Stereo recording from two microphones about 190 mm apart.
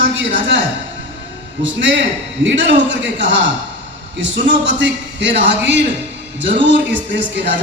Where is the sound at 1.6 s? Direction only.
75° right (ahead or behind).